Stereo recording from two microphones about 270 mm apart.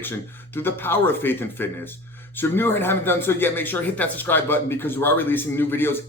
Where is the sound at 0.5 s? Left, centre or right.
Centre.